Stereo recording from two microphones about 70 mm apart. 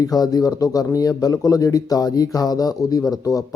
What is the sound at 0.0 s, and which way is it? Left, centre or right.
Speech, left.